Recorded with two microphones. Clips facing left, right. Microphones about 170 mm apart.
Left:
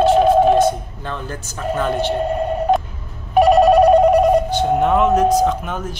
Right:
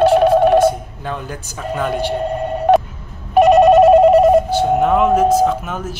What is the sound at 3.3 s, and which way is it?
Telephone bell ringing, centre (ahead or behind).